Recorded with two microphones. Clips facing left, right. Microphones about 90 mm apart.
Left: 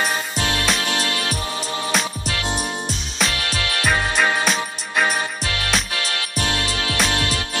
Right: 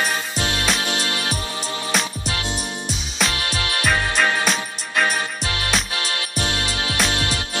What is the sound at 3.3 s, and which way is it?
Music, 30° right (ahead or behind).